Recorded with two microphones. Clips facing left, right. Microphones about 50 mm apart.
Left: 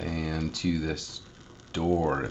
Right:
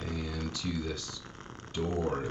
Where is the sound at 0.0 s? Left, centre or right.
Left.